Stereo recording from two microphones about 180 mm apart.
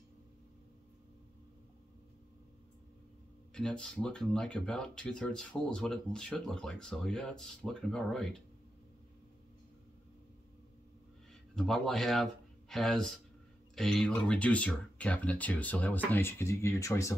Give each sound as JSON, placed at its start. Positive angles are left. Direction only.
{"t": 3.5, "sound": "speech", "side_deg": 5}
{"t": 11.5, "sound": "speech", "side_deg": 5}